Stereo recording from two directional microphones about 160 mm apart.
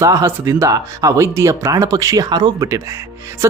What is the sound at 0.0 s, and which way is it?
Speech, 20° right (ahead or behind).